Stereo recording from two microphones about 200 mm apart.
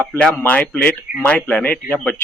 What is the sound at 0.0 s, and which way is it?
Speech, 5° left (ahead or behind).